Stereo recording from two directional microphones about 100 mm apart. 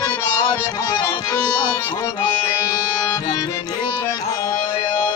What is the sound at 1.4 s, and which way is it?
Music, 40° left (ahead or behind).